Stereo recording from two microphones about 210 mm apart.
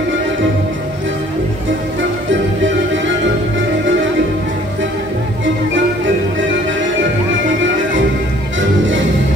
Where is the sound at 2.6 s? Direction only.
65° right (ahead or behind).